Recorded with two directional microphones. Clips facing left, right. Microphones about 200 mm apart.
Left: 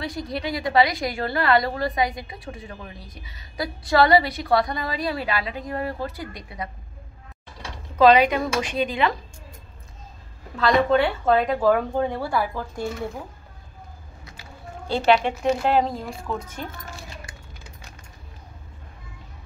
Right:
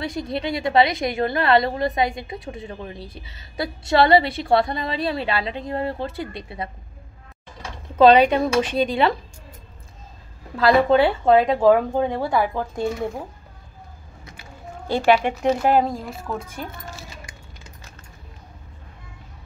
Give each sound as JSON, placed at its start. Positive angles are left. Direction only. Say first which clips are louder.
{"t": 0.0, "sound": "a woman's voice", "louder": "right 3 dB", "side_deg": -25}
{"t": 8.0, "sound": "a woman's voice", "louder": "right 3 dB", "side_deg": -30}
{"t": 10.9, "sound": "a woman's voice", "louder": "right 4 dB", "side_deg": -30}
{"t": 14.9, "sound": "speech", "louder": "right 2 dB", "side_deg": -10}